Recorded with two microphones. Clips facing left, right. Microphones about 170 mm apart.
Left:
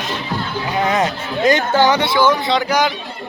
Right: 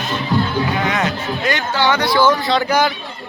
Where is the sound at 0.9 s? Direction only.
40° left (ahead or behind).